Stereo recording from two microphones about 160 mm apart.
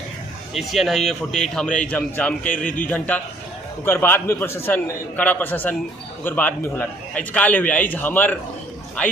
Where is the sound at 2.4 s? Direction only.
55° left (ahead or behind).